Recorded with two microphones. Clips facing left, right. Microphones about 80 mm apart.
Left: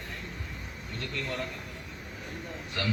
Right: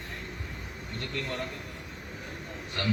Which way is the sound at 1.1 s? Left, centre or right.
Right.